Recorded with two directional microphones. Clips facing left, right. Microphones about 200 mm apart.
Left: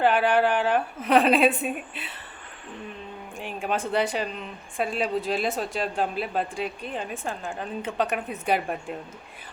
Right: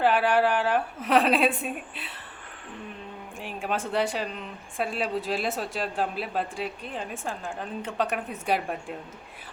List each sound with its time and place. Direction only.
0.0 s speech: centre (ahead or behind)
3.3 s speech: centre (ahead or behind)